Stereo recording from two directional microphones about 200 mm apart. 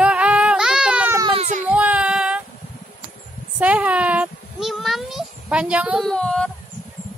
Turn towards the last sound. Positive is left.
turn(degrees=5)  # may be behind; listen again after turning